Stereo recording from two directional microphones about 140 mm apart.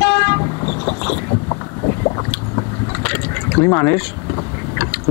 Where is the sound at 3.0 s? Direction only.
20° left (ahead or behind).